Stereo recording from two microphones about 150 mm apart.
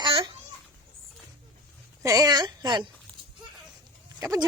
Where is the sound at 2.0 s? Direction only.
25° right (ahead or behind).